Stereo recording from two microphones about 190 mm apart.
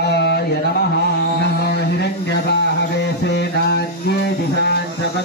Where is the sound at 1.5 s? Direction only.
60° left (ahead or behind).